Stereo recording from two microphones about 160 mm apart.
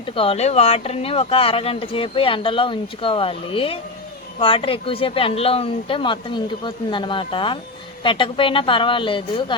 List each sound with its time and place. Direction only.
0.0 s speech: 35° left (ahead or behind)